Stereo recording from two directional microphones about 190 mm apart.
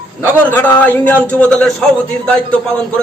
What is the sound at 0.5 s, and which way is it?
A man's voice, 10° left (ahead or behind).